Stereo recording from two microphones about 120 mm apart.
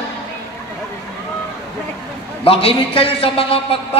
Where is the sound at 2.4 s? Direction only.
55° left (ahead or behind).